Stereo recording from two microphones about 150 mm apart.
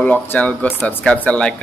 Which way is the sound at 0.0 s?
10° left (ahead or behind).